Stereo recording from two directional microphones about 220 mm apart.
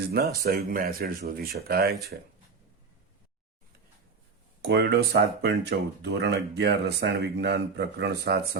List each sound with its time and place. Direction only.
0.4 s speech: 40° right (ahead or behind)
4.6 s speech: 50° right (ahead or behind)